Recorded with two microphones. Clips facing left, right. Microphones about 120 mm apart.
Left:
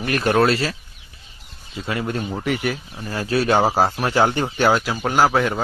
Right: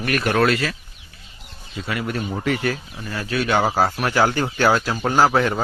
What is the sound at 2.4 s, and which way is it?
Speech, 20° left (ahead or behind).